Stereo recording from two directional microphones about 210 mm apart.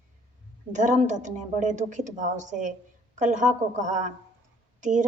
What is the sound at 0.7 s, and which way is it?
A woman's voice, 35° right (ahead or behind).